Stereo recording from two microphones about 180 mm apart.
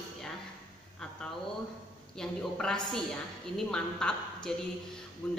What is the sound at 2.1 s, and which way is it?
A woman's voice, 5° left (ahead or behind).